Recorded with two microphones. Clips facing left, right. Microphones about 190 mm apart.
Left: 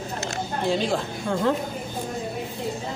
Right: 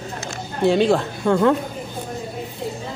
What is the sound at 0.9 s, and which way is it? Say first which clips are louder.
Speech: right 7 dB; 65° right (ahead or behind).